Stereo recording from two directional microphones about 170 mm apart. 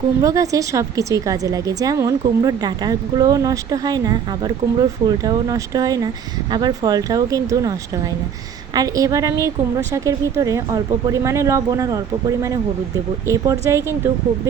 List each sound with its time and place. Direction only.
0.2 s a woman's voice: 20° right (ahead or behind)